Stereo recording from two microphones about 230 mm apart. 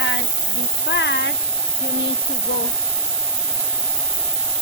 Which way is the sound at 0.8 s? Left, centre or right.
Left.